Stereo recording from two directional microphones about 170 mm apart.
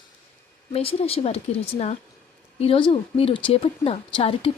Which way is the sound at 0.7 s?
35° left (ahead or behind).